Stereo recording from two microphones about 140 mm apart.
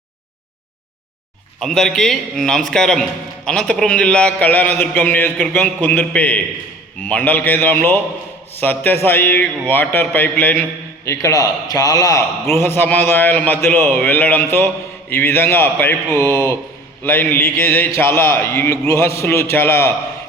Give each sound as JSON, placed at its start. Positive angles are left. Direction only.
{"t": 1.5, "sound": "a man's voice", "side_deg": 5}